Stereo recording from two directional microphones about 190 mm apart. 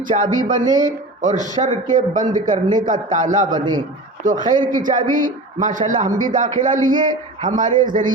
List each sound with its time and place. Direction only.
0.1 s speech: 40° right (ahead or behind)
3.5 s a man's voice: 25° right (ahead or behind)
4.2 s speech: 45° right (ahead or behind)